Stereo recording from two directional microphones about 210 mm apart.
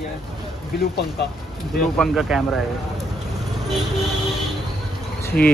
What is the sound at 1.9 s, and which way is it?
Speech, centre (ahead or behind).